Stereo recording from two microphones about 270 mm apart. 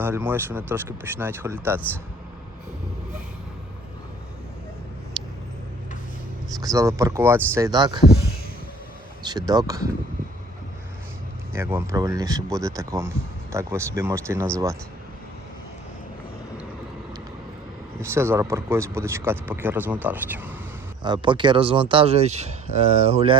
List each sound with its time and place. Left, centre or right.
0.0 s speech: centre
5.2 s vehicle: centre
6.6 s speech: centre
9.2 s speech: centre
11.5 s speech: centre
18.0 s speech: centre